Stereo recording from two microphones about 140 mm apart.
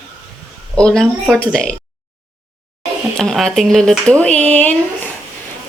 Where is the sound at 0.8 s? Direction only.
5° left (ahead or behind).